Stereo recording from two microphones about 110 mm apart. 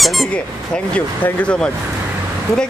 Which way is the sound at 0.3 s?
10° left (ahead or behind).